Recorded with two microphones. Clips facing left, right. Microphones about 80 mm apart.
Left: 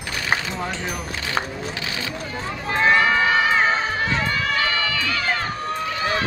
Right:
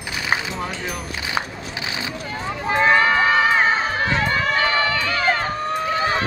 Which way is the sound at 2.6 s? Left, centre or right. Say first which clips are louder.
Right 1 dB; right.